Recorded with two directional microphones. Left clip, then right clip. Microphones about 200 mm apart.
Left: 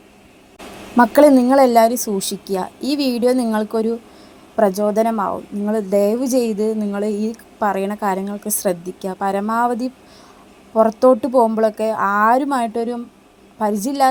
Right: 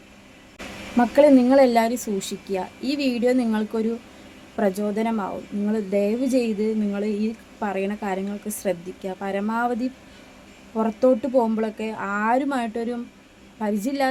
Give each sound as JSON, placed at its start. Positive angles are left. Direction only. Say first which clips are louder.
{"t": 0.9, "sound": "a woman's voice", "louder": "left 5 dB", "side_deg": 15}
{"t": 10.8, "sound": "a woman's voice", "louder": "left 7 dB", "side_deg": 10}